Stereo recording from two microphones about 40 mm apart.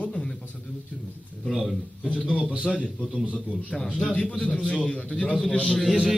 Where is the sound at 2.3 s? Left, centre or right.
Right.